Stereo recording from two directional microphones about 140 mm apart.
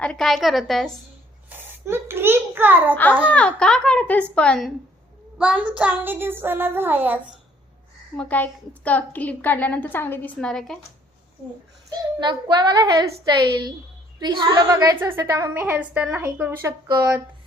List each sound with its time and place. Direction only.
0.0 s a woman's voice: 5° left (ahead or behind)
1.5 s a child's voice: 15° right (ahead or behind)
2.9 s a woman's voice: 10° left (ahead or behind)
5.4 s child singing: 10° right (ahead or behind)
8.1 s a woman's voice: 10° left (ahead or behind)
10.3 s a woman's voice: 5° left (ahead or behind)
11.9 s a child's voice: 30° right (ahead or behind)
15.6 s child singing: 10° right (ahead or behind)